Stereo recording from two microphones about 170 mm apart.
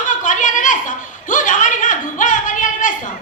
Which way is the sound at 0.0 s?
50° left (ahead or behind).